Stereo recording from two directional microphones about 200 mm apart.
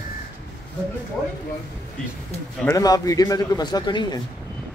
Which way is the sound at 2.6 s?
15° left (ahead or behind).